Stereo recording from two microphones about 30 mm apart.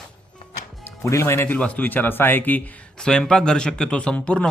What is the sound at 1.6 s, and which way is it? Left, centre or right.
Speech, left.